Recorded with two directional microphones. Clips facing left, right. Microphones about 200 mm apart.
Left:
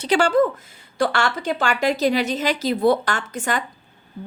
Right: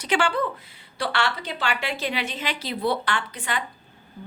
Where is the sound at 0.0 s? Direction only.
40° left (ahead or behind).